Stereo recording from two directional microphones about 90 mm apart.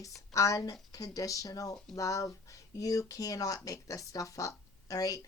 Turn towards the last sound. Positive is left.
turn(degrees=40)  # may be behind; listen again after turning